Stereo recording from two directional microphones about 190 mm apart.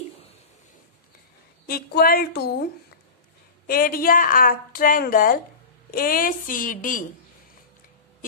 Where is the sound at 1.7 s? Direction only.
50° left (ahead or behind).